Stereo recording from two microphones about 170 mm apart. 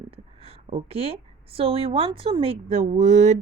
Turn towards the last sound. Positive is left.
turn(degrees=-45)  # may be behind; listen again after turning